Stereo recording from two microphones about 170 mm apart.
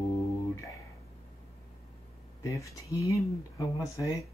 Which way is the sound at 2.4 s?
20° left (ahead or behind).